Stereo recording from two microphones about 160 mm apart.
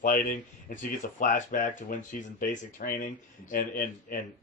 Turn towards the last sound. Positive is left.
turn(degrees=60)  # may be behind; listen again after turning